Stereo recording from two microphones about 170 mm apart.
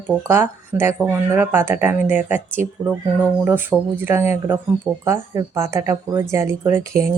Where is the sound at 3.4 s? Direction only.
10° right (ahead or behind).